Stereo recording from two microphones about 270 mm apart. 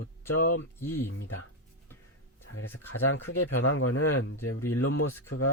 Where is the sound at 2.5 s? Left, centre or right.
Left.